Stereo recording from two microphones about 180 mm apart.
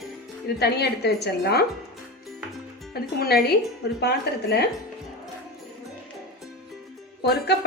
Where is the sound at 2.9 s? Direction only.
60° left (ahead or behind).